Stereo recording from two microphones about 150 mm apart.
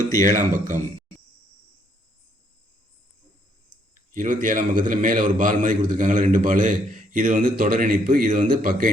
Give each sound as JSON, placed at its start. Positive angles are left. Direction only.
{"t": 0.2, "sound": "a man's voice", "side_deg": -60}
{"t": 4.1, "sound": "a man's voice", "side_deg": -55}